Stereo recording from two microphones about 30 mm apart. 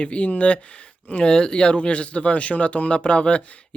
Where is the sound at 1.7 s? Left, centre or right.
Left.